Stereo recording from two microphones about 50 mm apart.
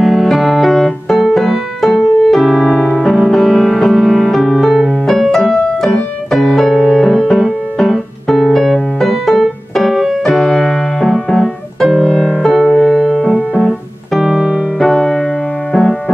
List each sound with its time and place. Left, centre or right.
0.0 s music: centre
5.5 s piano: centre
6.3 s keyboard: centre
6.8 s piano: centre
12.4 s music: centre
13.2 s piano: centre
13.7 s keyboard: centre
14.8 s music: centre